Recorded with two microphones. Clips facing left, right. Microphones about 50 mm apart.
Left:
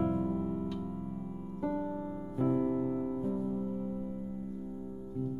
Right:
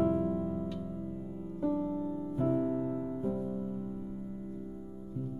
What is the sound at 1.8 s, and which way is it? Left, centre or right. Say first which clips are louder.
Music: right 3 dB; left.